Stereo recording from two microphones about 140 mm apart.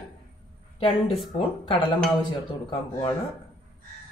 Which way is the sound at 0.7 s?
40° left (ahead or behind).